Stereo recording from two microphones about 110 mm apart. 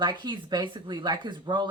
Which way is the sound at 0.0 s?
45° right (ahead or behind).